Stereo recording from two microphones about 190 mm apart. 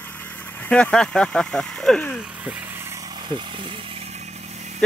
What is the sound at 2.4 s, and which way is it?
Vehicle, 5° right (ahead or behind).